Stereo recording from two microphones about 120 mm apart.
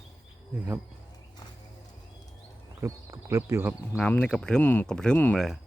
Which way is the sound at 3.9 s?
10° left (ahead or behind).